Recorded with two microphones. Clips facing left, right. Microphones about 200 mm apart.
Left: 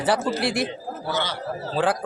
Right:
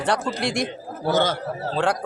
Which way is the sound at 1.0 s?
50° right (ahead or behind).